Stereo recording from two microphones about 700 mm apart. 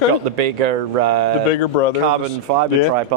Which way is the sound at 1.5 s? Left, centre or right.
Left.